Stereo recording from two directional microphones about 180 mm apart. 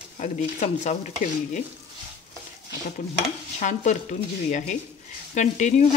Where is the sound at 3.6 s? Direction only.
40° left (ahead or behind).